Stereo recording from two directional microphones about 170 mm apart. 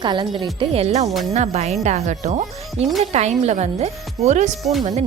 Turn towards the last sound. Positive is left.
turn(degrees=0)  # may be behind; listen again after turning